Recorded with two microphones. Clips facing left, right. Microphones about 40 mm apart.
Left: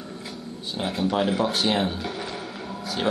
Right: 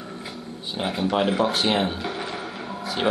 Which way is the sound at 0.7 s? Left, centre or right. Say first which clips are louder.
Right 1 dB; centre.